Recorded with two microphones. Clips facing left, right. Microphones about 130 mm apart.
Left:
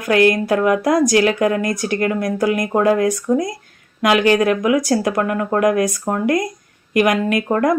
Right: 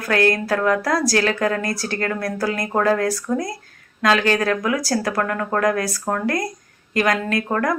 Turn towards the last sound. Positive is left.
turn(degrees=20)  # may be behind; listen again after turning